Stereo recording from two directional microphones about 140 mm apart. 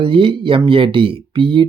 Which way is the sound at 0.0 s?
40° right (ahead or behind).